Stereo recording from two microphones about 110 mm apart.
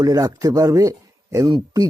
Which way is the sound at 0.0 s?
35° right (ahead or behind).